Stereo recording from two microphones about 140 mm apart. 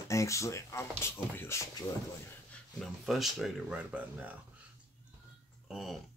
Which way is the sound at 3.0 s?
Centre (ahead or behind).